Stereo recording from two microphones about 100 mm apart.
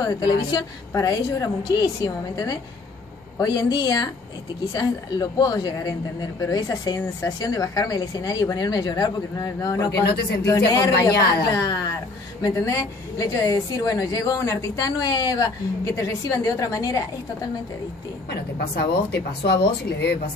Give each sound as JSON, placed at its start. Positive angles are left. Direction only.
{"t": 0.0, "sound": "a woman's voice", "side_deg": 45}